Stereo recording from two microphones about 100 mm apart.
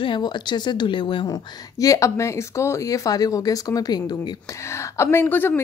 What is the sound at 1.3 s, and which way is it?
Speech, 35° left (ahead or behind).